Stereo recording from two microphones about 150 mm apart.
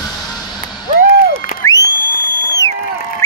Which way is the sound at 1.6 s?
20° left (ahead or behind).